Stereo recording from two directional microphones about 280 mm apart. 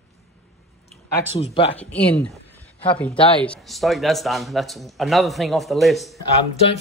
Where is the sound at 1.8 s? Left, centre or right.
Centre.